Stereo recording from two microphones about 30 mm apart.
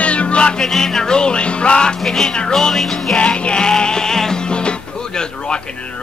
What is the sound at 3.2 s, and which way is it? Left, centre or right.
Music, left.